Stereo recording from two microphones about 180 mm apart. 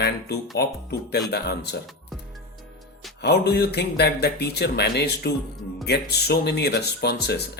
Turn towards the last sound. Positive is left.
turn(degrees=65)  # may be behind; listen again after turning